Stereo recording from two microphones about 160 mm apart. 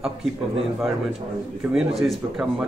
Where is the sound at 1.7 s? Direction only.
Centre (ahead or behind).